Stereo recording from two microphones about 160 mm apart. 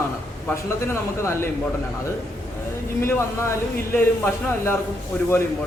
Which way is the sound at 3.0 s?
15° left (ahead or behind).